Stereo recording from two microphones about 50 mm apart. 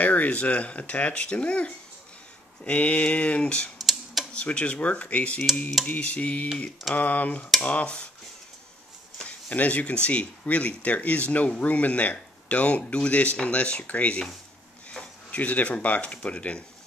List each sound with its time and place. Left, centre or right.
0.0 s speech: left
3.8 s a sound: centre
4.3 s speech: left
9.5 s speech: left
15.3 s speech: left